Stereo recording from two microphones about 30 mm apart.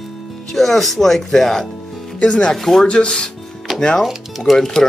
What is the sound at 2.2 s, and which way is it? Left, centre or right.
Speech, left.